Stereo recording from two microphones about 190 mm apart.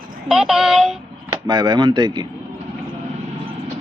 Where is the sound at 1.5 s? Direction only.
25° right (ahead or behind).